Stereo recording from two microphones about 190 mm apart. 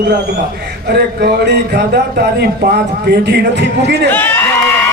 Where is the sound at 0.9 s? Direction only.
55° right (ahead or behind).